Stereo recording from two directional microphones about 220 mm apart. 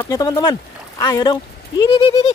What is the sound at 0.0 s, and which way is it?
Speech, 15° left (ahead or behind).